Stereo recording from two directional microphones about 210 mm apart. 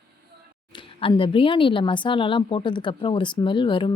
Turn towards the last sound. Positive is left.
turn(degrees=25)  # may be behind; listen again after turning